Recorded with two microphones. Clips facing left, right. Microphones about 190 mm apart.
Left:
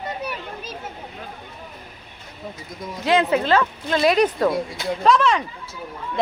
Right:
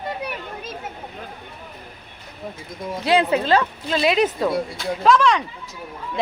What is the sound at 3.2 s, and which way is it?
Speech, 35° right (ahead or behind).